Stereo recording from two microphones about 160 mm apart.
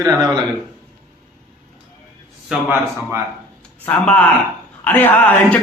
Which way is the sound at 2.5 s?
10° right (ahead or behind).